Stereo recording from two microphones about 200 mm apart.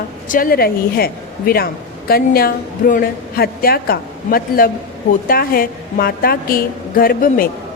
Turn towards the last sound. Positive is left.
turn(degrees=45)  # may be behind; listen again after turning